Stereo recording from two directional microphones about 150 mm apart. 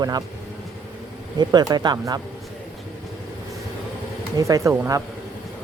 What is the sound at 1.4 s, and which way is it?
Speech, 30° right (ahead or behind).